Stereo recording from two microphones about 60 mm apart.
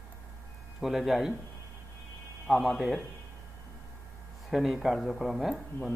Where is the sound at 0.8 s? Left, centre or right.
Centre.